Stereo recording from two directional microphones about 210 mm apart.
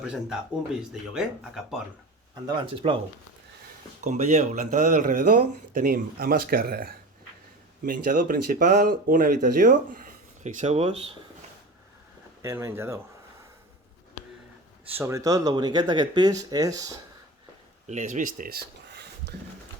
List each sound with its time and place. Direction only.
0.0 s speech: 5° right (ahead or behind)
2.3 s speech: 25° right (ahead or behind)
4.0 s speech: 35° right (ahead or behind)
12.4 s speech: 15° right (ahead or behind)
14.8 s speech: 10° right (ahead or behind)
17.8 s speech: 35° right (ahead or behind); by 19.3 s 50° right (ahead or behind)